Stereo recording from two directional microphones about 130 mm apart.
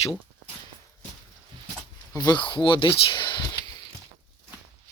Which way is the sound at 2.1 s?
30° left (ahead or behind).